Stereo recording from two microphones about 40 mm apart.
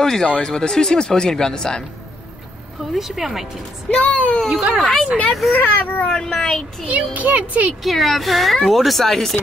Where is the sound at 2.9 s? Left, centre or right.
Centre.